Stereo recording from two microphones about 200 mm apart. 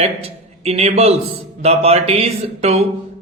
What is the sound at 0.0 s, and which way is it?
A man's voice, 30° right (ahead or behind).